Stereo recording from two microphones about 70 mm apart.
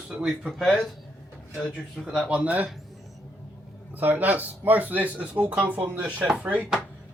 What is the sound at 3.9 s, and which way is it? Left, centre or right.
Speech, right.